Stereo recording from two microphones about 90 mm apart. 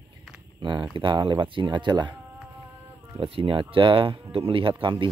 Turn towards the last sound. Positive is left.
turn(degrees=-70)  # may be behind; listen again after turning